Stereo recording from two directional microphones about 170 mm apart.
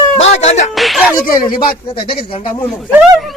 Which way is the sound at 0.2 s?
40° left (ahead or behind).